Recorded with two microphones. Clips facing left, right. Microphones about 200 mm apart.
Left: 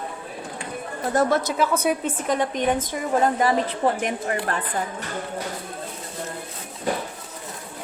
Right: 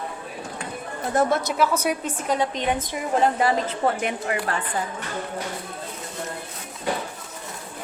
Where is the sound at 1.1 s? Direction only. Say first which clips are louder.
Even; 35° left (ahead or behind).